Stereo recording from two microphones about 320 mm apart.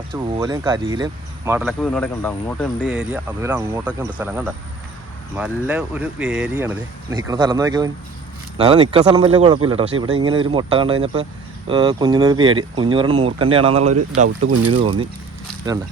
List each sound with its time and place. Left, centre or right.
0.1 s speech: centre